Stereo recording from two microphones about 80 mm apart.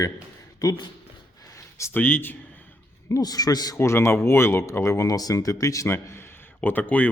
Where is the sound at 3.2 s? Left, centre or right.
Left.